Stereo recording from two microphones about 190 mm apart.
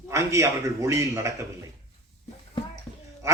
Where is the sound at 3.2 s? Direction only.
15° right (ahead or behind).